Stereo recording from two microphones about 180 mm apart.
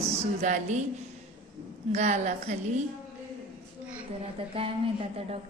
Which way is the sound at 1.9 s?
40° right (ahead or behind).